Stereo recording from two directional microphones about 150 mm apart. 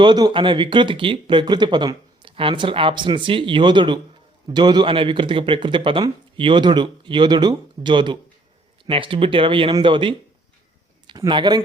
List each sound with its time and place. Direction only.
0.0 s speech: 30° right (ahead or behind)